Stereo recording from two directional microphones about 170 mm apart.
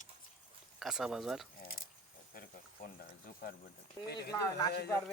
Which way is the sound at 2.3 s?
60° left (ahead or behind).